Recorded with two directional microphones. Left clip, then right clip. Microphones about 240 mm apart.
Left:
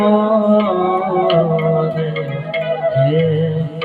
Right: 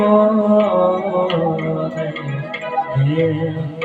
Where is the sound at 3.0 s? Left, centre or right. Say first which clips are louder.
Left 5 dB; left.